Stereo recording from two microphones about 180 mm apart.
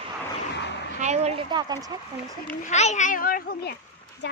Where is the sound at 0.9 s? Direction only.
40° right (ahead or behind).